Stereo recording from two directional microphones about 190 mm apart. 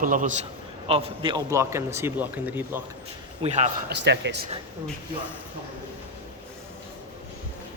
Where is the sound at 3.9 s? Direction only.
65° right (ahead or behind).